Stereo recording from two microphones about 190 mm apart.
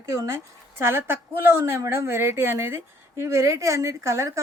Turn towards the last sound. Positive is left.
turn(degrees=-15)  # may be behind; listen again after turning